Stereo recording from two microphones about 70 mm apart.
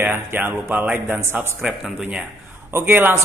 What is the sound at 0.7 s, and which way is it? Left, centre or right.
Speech, right.